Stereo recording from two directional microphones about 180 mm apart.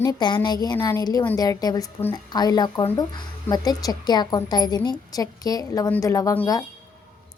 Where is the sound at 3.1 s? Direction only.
25° left (ahead or behind).